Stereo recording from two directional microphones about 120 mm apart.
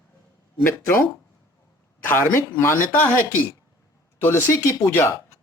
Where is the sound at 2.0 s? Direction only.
20° left (ahead or behind).